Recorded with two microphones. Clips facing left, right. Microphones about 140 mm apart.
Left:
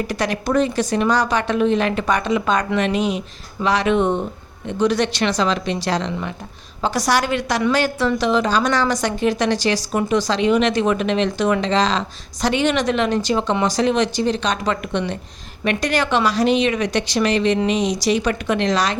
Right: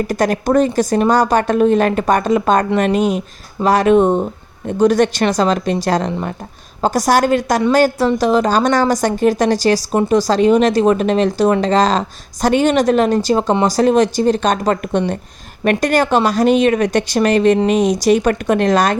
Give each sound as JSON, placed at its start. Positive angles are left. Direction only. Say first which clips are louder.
{"t": 0.1, "sound": "a woman's voice", "louder": "right 7 dB", "side_deg": -45}